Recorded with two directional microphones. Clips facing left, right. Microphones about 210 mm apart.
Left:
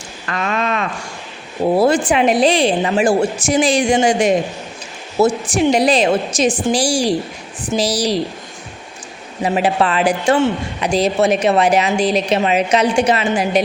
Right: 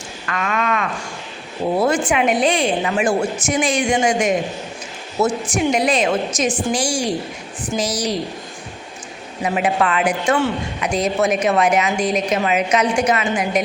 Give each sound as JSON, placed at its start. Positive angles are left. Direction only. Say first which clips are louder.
{"t": 0.3, "sound": "a sound", "louder": "left 2 dB", "side_deg": 30}
{"t": 1.8, "sound": "a man's voice", "louder": "left 3 dB", "side_deg": 30}
{"t": 9.4, "sound": "a man's voice", "louder": "left 3 dB", "side_deg": 30}